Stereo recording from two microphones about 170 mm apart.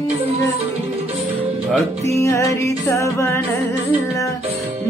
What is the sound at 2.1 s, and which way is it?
Music, 15° left (ahead or behind).